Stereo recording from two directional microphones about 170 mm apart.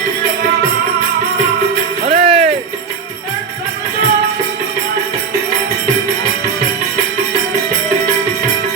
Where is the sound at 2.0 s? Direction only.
40° right (ahead or behind).